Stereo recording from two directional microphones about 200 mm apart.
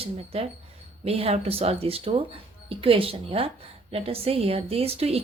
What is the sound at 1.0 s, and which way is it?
A woman's voice, 30° right (ahead or behind).